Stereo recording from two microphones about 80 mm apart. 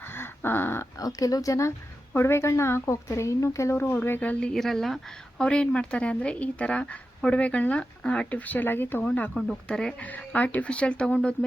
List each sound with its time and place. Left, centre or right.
0.0 s dog: left
0.9 s speech: left
4.2 s speech: centre
9.3 s speech: centre